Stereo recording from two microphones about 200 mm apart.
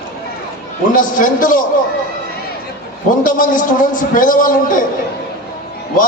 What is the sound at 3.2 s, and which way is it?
A man's voice, 40° left (ahead or behind).